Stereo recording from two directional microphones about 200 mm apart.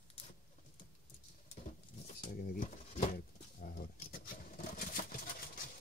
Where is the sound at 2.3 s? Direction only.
45° left (ahead or behind).